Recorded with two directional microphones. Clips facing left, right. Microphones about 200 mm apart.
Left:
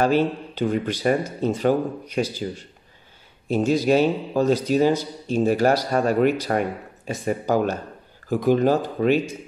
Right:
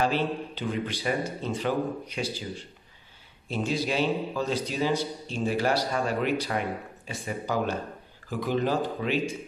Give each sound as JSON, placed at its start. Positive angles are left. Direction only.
{"t": 0.0, "sound": "a man's voice", "side_deg": 45}
{"t": 3.4, "sound": "a man's voice", "side_deg": 45}